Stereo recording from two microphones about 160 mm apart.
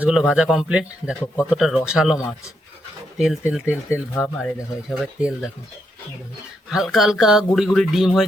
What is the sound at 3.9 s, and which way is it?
Speech, 15° left (ahead or behind).